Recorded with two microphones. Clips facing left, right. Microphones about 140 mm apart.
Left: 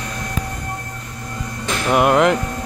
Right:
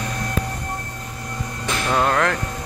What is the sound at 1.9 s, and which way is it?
Music, 15° left (ahead or behind).